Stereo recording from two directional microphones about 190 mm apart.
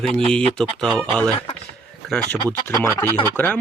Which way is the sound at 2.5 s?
15° left (ahead or behind).